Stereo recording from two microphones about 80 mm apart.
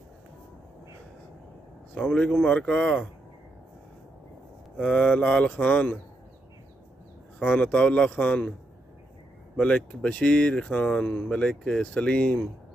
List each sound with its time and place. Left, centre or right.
2.0 s speech: centre
4.7 s speech: centre
7.3 s speech: centre
9.6 s speech: centre